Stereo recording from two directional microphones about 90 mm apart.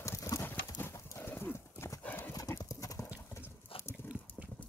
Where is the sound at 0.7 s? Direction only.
25° left (ahead or behind).